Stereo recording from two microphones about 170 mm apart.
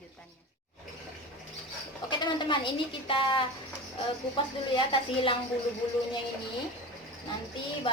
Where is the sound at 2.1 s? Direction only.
25° left (ahead or behind).